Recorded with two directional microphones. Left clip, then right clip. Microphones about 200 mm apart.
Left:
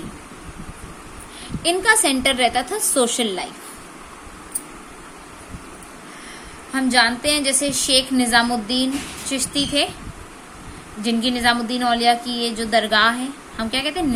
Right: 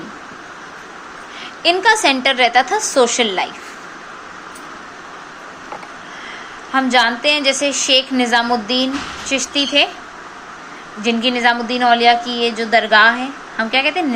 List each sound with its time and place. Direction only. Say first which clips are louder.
1.6 s a woman's voice: right 5 dB; 30° left (ahead or behind)
6.7 s a woman's voice: right 4 dB; 30° left (ahead or behind)
11.3 s a woman's voice: right 4 dB; 30° left (ahead or behind)